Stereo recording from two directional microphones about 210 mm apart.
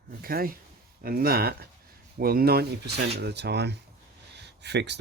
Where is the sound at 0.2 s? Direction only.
45° right (ahead or behind).